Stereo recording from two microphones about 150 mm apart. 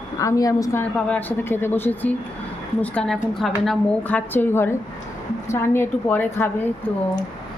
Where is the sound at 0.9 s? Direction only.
10° left (ahead or behind).